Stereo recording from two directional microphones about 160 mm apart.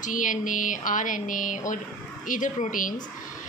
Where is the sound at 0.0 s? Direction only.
55° left (ahead or behind).